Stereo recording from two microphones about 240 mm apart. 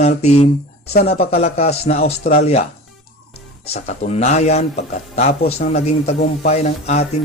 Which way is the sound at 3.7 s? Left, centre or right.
Left.